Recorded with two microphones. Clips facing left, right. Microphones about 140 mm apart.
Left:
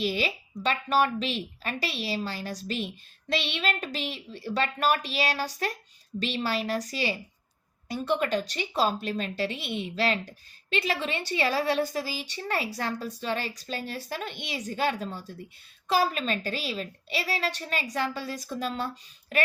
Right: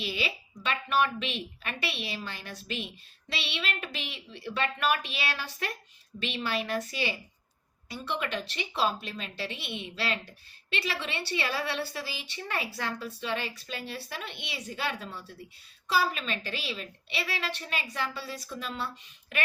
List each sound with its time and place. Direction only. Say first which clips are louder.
0.0 s a woman's voice: left 5 dB; 40° left (ahead or behind)